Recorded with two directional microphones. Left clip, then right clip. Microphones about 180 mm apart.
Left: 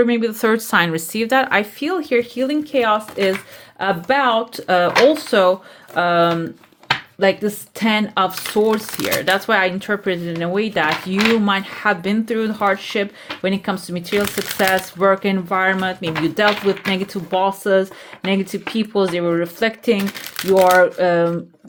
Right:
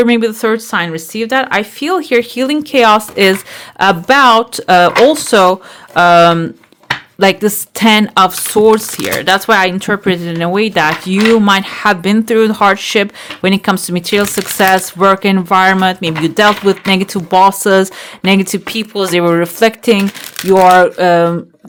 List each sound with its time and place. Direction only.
0.0 s speech: 30° right (ahead or behind)
0.4 s speech: 5° right (ahead or behind); by 21.3 s 30° right (ahead or behind)